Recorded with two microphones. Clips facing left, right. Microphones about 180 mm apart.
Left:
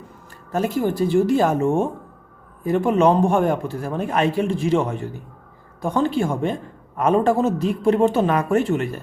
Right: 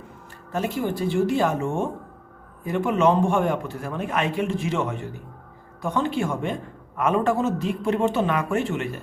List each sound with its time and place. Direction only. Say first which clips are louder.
0.5 s a man's voice: left 4 dB; 40° left (ahead or behind)